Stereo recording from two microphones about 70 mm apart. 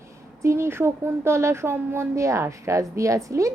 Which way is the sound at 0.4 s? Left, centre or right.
Right.